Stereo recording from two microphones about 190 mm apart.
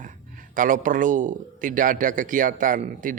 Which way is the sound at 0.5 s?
45° right (ahead or behind).